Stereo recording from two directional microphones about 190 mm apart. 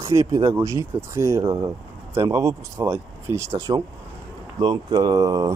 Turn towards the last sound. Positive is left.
turn(degrees=-20)  # may be behind; listen again after turning